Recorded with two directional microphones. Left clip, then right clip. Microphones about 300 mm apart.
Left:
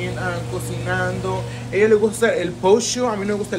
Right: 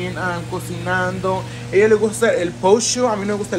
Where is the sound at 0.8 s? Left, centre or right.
Centre.